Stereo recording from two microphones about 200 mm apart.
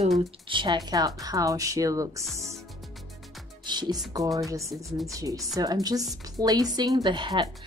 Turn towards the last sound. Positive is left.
turn(degrees=-25)  # may be behind; listen again after turning